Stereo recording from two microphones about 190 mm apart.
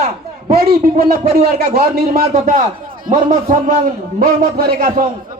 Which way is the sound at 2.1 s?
40° right (ahead or behind).